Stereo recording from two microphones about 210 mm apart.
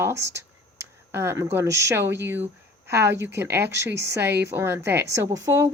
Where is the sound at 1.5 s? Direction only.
15° right (ahead or behind).